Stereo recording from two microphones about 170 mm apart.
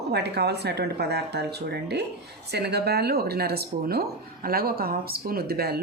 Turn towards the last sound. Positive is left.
turn(degrees=-65)  # may be behind; listen again after turning